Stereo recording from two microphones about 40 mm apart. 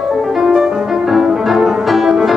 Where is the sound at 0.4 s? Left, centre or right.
Centre.